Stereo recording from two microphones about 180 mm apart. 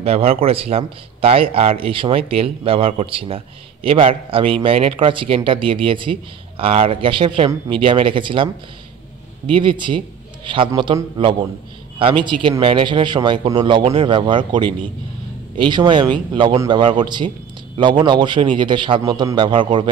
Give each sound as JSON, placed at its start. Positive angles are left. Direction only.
{"t": 0.0, "sound": "speech", "side_deg": -35}
{"t": 9.5, "sound": "speech", "side_deg": -30}